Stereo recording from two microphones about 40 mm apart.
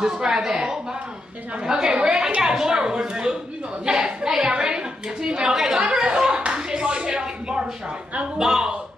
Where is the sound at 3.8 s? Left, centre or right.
Centre.